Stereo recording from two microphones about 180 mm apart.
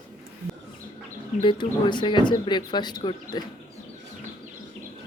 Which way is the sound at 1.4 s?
25° left (ahead or behind).